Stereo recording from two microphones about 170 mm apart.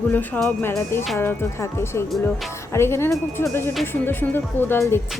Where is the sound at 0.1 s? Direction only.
5° left (ahead or behind).